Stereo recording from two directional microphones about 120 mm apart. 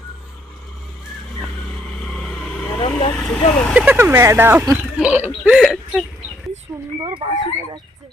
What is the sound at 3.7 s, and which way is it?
Speech, 10° right (ahead or behind).